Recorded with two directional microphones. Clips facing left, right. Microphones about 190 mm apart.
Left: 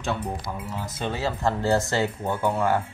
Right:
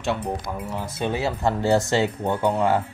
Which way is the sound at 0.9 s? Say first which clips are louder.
Right 3 dB; 15° right (ahead or behind).